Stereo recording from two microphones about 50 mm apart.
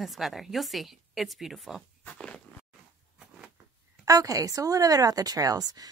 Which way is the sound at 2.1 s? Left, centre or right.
Left.